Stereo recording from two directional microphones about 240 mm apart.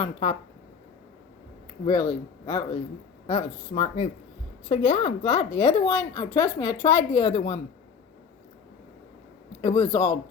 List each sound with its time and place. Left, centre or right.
0.0 s speech: left
1.8 s speech: centre
9.6 s speech: centre